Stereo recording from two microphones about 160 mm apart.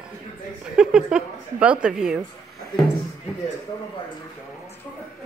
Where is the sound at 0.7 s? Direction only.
5° right (ahead or behind).